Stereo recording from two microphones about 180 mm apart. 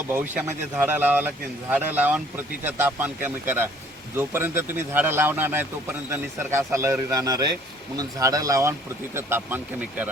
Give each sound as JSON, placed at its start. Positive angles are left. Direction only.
{"t": 0.1, "sound": "speech", "side_deg": -10}